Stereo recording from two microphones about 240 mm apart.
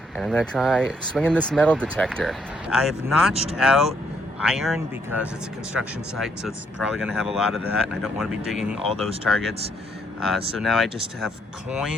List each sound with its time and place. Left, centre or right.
0.2 s speech: centre